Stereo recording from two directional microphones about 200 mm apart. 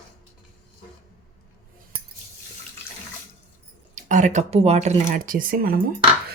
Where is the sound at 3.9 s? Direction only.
40° right (ahead or behind).